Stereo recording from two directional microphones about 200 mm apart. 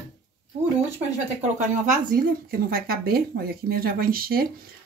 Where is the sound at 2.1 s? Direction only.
50° right (ahead or behind).